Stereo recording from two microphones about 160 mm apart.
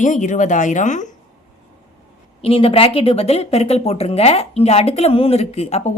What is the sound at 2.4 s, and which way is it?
Speech, 35° left (ahead or behind).